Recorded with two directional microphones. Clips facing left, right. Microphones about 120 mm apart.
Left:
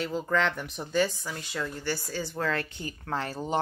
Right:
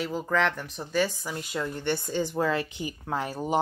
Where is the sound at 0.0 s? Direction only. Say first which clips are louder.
Right 1 dB; 5° right (ahead or behind).